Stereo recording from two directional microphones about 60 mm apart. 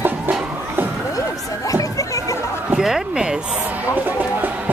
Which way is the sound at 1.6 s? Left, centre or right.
Left.